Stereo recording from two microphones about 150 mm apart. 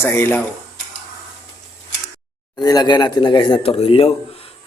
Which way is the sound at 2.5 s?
25° left (ahead or behind).